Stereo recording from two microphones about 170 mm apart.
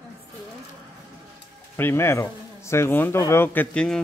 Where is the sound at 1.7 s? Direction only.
15° left (ahead or behind).